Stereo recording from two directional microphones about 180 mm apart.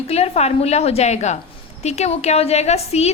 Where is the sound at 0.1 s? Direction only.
35° left (ahead or behind).